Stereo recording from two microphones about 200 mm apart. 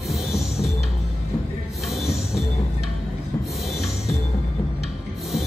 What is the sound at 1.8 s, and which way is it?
Music, centre (ahead or behind).